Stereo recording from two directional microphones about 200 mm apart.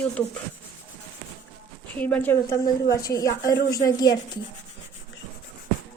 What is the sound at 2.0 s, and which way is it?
Speech, 10° left (ahead or behind).